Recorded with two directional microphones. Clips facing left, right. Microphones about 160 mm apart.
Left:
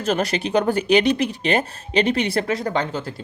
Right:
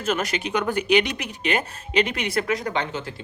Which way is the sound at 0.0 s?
35° left (ahead or behind).